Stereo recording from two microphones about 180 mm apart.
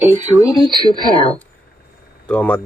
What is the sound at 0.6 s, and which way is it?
Speech, 25° right (ahead or behind).